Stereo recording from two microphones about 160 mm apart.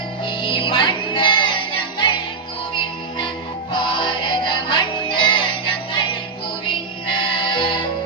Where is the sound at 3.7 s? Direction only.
30° left (ahead or behind).